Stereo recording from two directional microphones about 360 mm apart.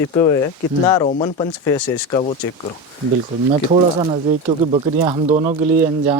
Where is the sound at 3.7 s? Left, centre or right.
Centre.